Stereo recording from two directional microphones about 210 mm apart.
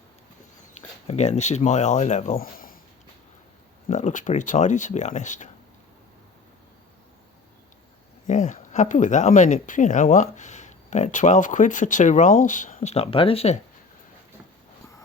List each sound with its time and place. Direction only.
1.0 s speech: 30° left (ahead or behind)
3.8 s speech: 35° left (ahead or behind)
8.3 s speech: 35° left (ahead or behind)